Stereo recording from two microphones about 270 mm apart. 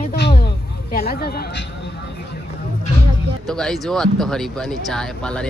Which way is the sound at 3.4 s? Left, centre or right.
Centre.